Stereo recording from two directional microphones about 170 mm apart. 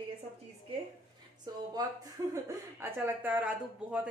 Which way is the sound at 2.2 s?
20° right (ahead or behind).